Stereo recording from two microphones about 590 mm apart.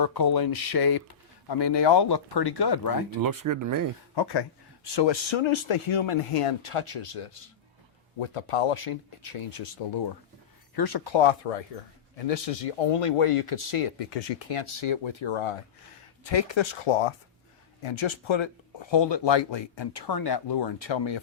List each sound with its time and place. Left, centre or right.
0.0 s speech: left
3.2 s speech: right
4.1 s speech: left
10.8 s speech: left
12.9 s speech: left
16.3 s speech: left